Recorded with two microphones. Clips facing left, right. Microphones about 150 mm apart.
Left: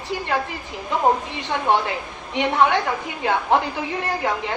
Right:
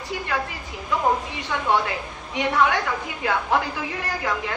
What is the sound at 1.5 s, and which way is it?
A woman's voice, 25° left (ahead or behind).